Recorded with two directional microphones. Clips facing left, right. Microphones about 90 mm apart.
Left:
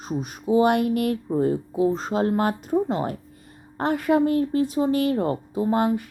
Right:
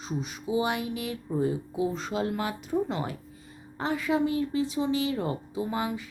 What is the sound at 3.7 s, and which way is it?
A woman's voice, 55° left (ahead or behind).